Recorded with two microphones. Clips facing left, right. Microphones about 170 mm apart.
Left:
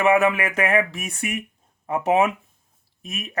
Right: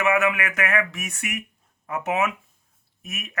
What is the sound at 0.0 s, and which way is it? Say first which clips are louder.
Speech: left 4 dB; 30° left (ahead or behind).